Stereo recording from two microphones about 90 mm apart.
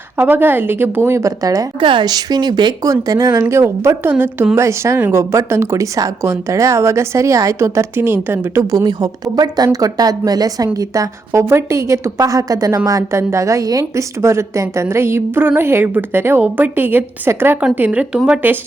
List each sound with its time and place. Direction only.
0.2 s a woman's voice: 20° right (ahead or behind); by 1.6 s 40° right (ahead or behind)
1.8 s speech: 65° right (ahead or behind)
2.8 s a woman's voice: 40° right (ahead or behind)
3.5 s a woman's voice: 30° right (ahead or behind)
8.7 s a woman's voice: 45° right (ahead or behind); by 18.6 s 20° right (ahead or behind)